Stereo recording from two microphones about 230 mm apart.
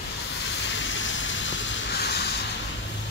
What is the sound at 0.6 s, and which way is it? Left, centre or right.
Vehicle, left.